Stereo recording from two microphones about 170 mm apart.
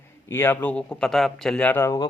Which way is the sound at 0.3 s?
15° left (ahead or behind).